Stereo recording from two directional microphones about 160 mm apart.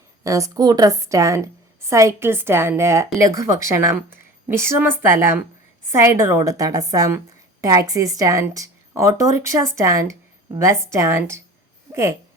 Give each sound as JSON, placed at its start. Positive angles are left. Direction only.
{"t": 0.3, "sound": "a woman's voice", "side_deg": -20}